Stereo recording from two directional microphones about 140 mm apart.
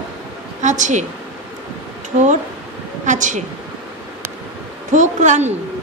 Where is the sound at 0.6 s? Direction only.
60° right (ahead or behind).